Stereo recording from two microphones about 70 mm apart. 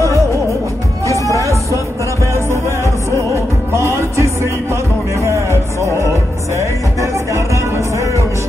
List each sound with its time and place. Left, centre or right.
1.2 s music: right
5.8 s music: right